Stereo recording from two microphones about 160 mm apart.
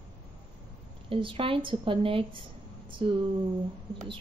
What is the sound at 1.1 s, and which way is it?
Speech, 35° right (ahead or behind).